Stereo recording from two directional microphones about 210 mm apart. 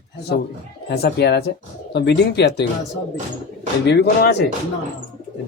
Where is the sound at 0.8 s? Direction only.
50° left (ahead or behind).